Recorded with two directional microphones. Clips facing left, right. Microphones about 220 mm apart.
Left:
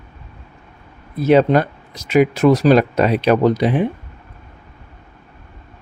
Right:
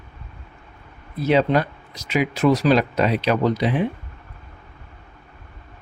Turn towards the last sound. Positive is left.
turn(degrees=50)  # may be behind; listen again after turning